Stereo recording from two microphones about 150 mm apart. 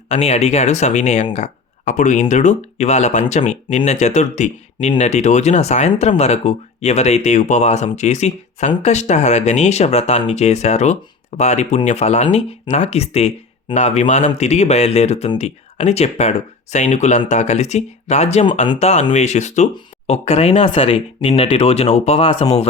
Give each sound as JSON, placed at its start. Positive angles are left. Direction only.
{"t": 0.1, "sound": "speech", "side_deg": 45}